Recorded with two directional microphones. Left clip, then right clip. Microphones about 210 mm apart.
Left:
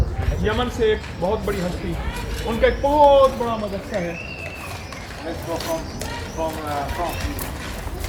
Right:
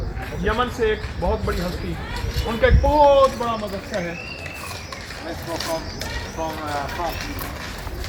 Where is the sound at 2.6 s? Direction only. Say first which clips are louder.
Left 1 dB; 5° left (ahead or behind).